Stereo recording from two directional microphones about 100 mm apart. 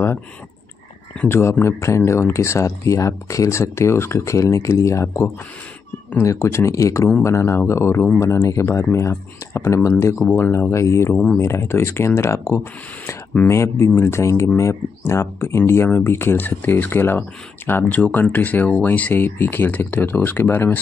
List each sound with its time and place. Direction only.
1.3 s speech: 25° left (ahead or behind)